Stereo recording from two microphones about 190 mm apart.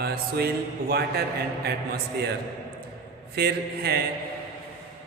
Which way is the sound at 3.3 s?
60° right (ahead or behind).